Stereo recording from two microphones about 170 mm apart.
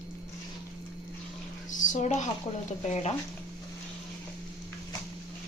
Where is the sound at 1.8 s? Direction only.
45° left (ahead or behind).